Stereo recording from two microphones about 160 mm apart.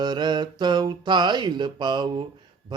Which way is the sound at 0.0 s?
25° right (ahead or behind).